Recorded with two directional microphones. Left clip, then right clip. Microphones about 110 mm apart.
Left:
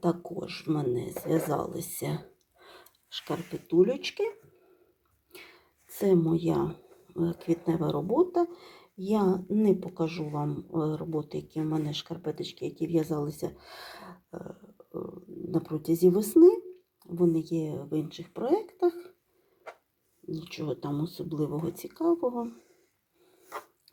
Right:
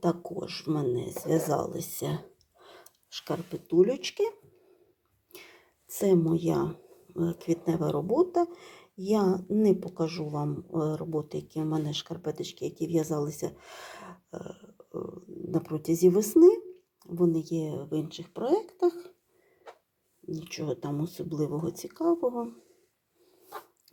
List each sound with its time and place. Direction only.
0.0 s speech: 20° right (ahead or behind)
3.7 s speech: 5° right (ahead or behind)
5.3 s a sound: 15° right (ahead or behind)
7.4 s speech: 10° right (ahead or behind)
20.4 s speech: 5° right (ahead or behind)